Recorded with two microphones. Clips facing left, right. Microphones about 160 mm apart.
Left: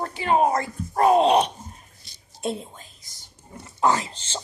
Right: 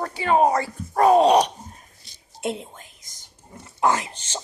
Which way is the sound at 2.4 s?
20° right (ahead or behind).